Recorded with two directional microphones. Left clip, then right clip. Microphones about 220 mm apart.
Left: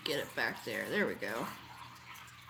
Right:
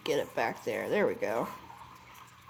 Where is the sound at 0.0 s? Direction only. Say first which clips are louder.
Right 5 dB; 30° right (ahead or behind).